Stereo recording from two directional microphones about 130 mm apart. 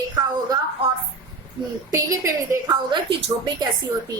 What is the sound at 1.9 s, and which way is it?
A woman's voice, 25° right (ahead or behind).